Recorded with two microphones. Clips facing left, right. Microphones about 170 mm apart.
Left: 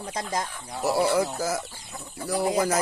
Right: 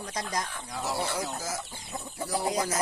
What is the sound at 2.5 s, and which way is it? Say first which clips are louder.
Speech: left 6 dB; 70° left (ahead or behind).